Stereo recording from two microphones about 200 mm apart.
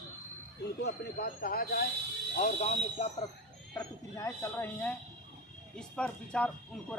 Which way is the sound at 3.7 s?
15° left (ahead or behind).